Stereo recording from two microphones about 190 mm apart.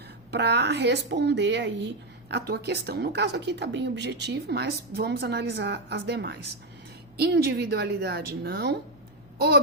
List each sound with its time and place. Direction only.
0.3 s speech: 60° right (ahead or behind)